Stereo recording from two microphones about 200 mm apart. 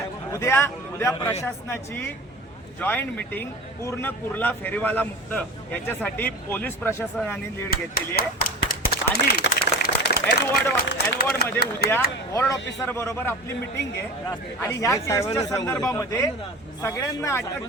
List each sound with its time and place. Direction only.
0.3 s speech: 15° left (ahead or behind)
7.7 s speech: 50° left (ahead or behind)
12.3 s speech: 15° left (ahead or behind)